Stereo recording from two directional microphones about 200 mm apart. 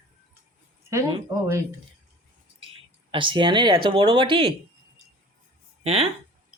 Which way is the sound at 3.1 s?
25° right (ahead or behind).